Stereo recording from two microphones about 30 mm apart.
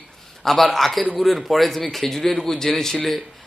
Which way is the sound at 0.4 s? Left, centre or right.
Centre.